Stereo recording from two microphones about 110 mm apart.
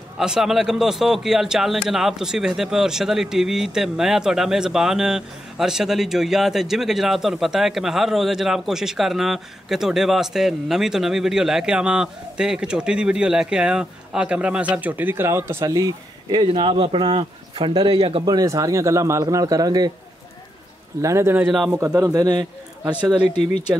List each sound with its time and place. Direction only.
0.2 s a man's voice: 5° right (ahead or behind); by 15.7 s 25° right (ahead or behind)
15.7 s speech: 35° right (ahead or behind); by 18.2 s 55° right (ahead or behind)
18.2 s speech: 35° right (ahead or behind)
21.0 s speech: 25° right (ahead or behind)
21.5 s a man's voice: 5° right (ahead or behind)
21.7 s speech: 25° right (ahead or behind)